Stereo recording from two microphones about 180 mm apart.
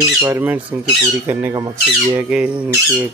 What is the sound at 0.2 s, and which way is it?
Speech, 10° right (ahead or behind).